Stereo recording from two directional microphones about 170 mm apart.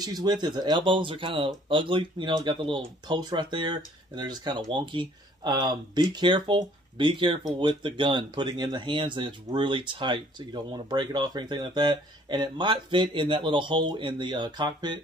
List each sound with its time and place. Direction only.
0.0 s speech: 25° right (ahead or behind)